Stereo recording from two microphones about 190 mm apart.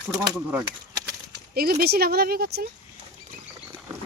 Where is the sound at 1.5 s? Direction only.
55° right (ahead or behind).